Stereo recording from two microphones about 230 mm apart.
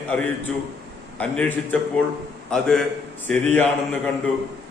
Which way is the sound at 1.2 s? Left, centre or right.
Centre.